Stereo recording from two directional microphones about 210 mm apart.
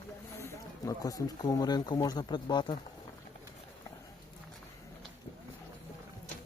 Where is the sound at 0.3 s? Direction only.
15° left (ahead or behind).